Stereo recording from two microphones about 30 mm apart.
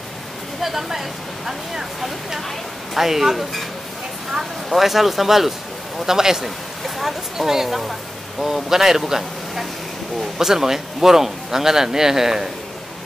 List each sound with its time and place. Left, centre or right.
0.6 s a woman's voice: centre
6.0 s speech: centre
6.4 s speech: centre